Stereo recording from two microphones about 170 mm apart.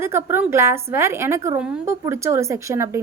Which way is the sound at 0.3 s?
15° right (ahead or behind).